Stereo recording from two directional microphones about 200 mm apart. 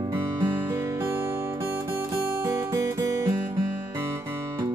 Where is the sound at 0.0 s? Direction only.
15° right (ahead or behind).